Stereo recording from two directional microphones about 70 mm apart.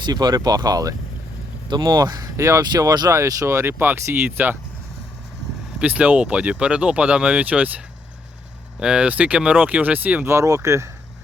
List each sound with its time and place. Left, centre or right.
0.0 s speech: right
1.7 s speech: right
2.3 s speech: right
2.6 s speech: right
3.1 s speech: right
5.8 s speech: centre
8.8 s speech: centre
10.2 s speech: right